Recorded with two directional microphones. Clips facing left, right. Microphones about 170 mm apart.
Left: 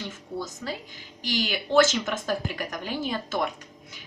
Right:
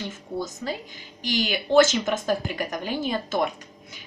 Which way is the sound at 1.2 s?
15° right (ahead or behind).